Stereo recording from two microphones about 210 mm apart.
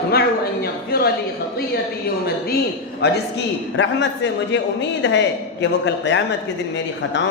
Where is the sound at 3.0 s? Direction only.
50° left (ahead or behind).